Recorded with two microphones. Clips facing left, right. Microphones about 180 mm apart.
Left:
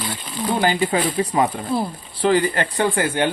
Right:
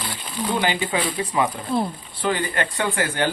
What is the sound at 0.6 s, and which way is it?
A woman's voice, 40° left (ahead or behind).